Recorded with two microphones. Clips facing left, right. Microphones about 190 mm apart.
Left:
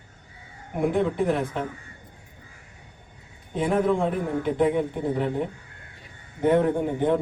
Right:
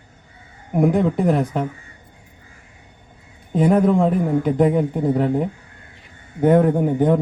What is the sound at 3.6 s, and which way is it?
A man's voice, 45° right (ahead or behind).